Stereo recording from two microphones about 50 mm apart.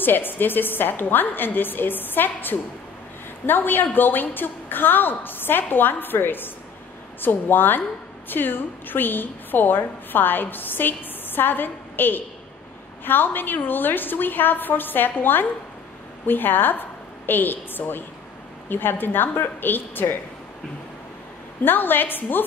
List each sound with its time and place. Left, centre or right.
0.0 s a woman's voice: left
21.6 s a woman's voice: left